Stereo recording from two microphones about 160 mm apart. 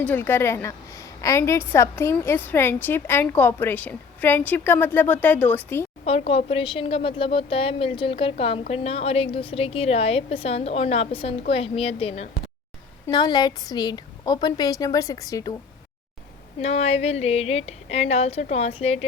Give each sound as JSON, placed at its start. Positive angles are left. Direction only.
{"t": 0.0, "sound": "a woman's voice", "side_deg": 10}
{"t": 6.1, "sound": "a woman's voice", "side_deg": 40}
{"t": 13.1, "sound": "a woman's voice", "side_deg": 25}
{"t": 16.6, "sound": "a woman's voice", "side_deg": 40}